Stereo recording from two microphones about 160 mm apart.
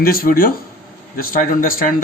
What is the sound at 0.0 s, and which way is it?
A man's voice, 65° left (ahead or behind).